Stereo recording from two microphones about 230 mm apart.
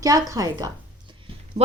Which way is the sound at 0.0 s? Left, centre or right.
Centre.